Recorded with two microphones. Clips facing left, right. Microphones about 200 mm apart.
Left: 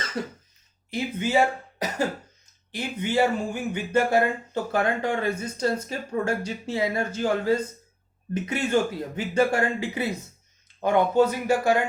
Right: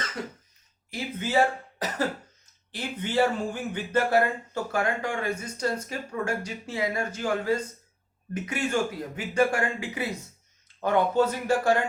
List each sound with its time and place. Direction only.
0.2 s speech: 30° left (ahead or behind)
0.9 s speech: 15° left (ahead or behind)
10.8 s speech: 15° left (ahead or behind)